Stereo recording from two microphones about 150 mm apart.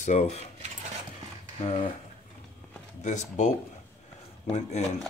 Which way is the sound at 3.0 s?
55° left (ahead or behind).